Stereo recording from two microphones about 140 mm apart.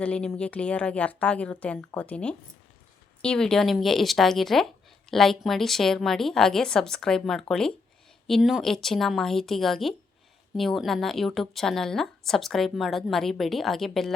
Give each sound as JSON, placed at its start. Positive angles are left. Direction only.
{"t": 0.0, "sound": "a woman's voice", "side_deg": 5}